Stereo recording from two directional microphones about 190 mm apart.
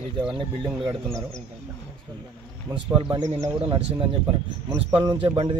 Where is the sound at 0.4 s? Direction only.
25° right (ahead or behind).